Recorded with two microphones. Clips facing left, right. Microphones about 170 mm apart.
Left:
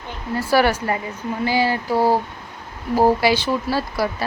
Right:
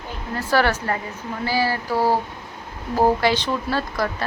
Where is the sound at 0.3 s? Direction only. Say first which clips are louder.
Left 3 dB; 10° left (ahead or behind).